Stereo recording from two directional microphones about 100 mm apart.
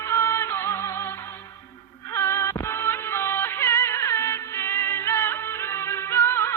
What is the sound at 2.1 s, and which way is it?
Music, 30° left (ahead or behind).